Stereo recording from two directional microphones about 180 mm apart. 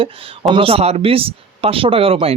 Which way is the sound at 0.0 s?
30° right (ahead or behind).